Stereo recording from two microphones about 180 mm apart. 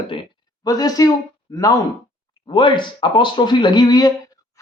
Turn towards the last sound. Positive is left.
turn(degrees=20)  # may be behind; listen again after turning